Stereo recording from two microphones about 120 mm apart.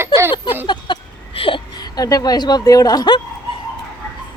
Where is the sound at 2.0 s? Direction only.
30° left (ahead or behind).